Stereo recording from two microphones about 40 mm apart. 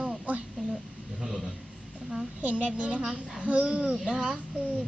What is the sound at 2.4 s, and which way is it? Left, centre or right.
A woman's voice, right.